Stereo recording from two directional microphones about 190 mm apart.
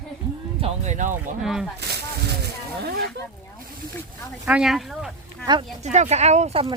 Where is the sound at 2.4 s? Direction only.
60° right (ahead or behind).